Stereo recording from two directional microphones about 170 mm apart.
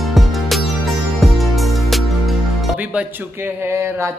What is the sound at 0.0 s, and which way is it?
Music, centre (ahead or behind).